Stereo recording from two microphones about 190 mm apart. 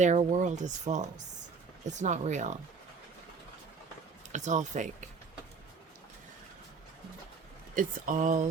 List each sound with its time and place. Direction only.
0.0 s speech: 40° right (ahead or behind)
4.3 s speech: 40° right (ahead or behind)
7.8 s speech: 45° right (ahead or behind)